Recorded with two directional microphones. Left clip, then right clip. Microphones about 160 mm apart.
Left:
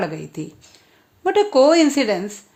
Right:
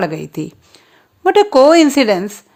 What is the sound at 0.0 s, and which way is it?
A woman's voice, 35° right (ahead or behind).